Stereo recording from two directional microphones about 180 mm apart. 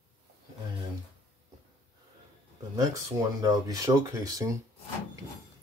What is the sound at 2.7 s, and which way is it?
Speech, 20° right (ahead or behind).